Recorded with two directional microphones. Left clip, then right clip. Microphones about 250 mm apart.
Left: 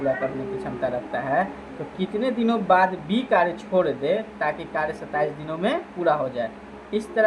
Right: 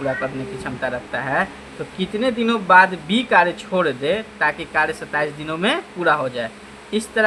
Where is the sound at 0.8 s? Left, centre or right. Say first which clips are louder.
Right 2 dB; right.